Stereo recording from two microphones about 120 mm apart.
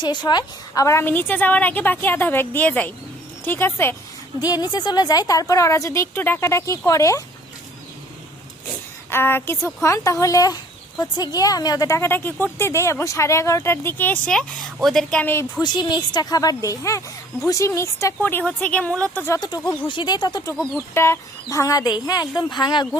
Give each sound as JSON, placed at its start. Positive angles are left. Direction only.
{"t": 0.0, "sound": "a woman's voice", "side_deg": 40}
{"t": 4.4, "sound": "speech", "side_deg": 35}
{"t": 9.0, "sound": "speech", "side_deg": 20}
{"t": 14.3, "sound": "a woman's voice", "side_deg": 0}
{"t": 15.2, "sound": "speech", "side_deg": 20}
{"t": 15.6, "sound": "a woman's voice", "side_deg": 35}
{"t": 19.4, "sound": "a woman's voice", "side_deg": 35}
{"t": 20.7, "sound": "a woman's voice", "side_deg": 20}